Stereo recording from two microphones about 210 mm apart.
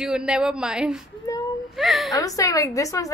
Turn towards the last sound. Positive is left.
turn(degrees=15)  # may be behind; listen again after turning